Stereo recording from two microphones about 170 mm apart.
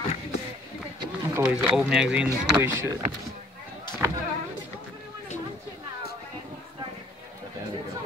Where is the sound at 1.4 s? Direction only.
5° right (ahead or behind).